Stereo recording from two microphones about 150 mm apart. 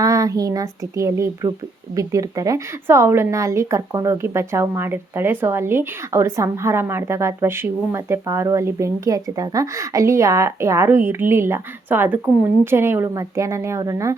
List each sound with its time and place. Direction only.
0.0 s a woman's voice: 20° right (ahead or behind)